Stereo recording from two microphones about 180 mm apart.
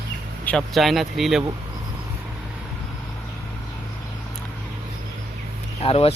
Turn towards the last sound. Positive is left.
turn(degrees=35)  # may be behind; listen again after turning